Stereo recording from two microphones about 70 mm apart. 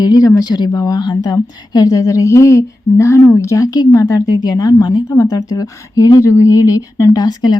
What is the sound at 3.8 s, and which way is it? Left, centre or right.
A woman's voice, left.